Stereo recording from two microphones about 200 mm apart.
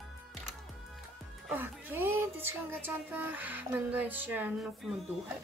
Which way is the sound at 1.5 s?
10° right (ahead or behind).